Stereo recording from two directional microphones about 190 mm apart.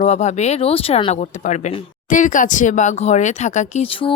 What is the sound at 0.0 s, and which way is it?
Speech, 35° left (ahead or behind).